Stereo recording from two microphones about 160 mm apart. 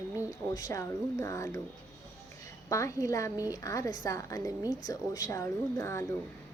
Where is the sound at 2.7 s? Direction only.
20° left (ahead or behind).